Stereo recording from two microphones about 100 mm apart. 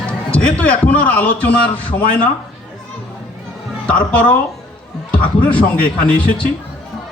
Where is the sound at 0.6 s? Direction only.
15° left (ahead or behind).